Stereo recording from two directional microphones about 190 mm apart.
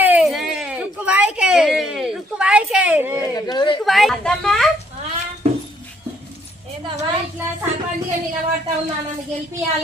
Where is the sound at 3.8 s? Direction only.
Centre (ahead or behind).